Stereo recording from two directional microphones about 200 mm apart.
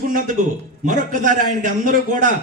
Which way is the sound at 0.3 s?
40° right (ahead or behind).